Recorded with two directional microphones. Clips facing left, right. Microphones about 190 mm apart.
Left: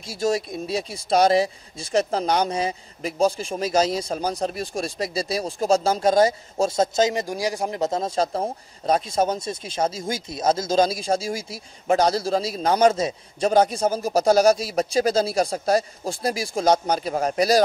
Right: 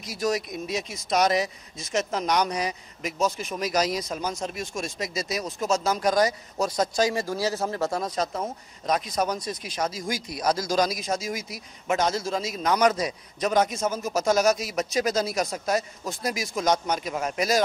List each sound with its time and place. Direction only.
0.0 s speech: 30° left (ahead or behind)